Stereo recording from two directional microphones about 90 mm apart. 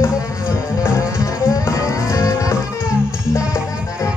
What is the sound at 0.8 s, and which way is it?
Music, 30° left (ahead or behind).